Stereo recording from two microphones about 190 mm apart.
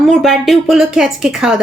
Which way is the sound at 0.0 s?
Centre (ahead or behind).